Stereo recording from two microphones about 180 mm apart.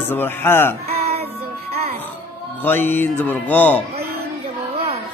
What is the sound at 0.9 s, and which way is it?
Music, 35° right (ahead or behind).